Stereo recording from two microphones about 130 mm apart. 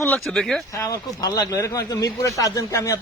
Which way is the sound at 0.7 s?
25° left (ahead or behind).